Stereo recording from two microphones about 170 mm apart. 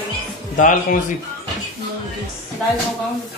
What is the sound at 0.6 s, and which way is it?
Speech, 55° left (ahead or behind).